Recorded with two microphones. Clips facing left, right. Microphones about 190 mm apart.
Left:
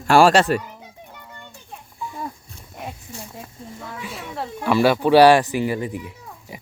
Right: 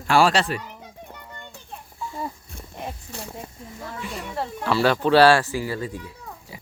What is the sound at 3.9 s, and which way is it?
Speech, centre (ahead or behind).